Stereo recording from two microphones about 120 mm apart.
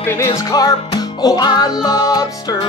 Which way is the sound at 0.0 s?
20° left (ahead or behind).